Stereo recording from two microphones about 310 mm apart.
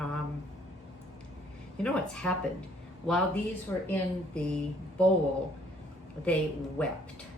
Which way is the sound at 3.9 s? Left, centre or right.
Centre.